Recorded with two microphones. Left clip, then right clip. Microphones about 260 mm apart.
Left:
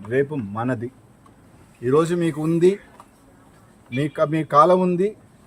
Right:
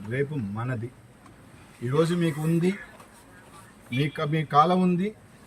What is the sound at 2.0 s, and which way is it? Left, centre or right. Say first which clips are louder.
Speech: left 3 dB; left.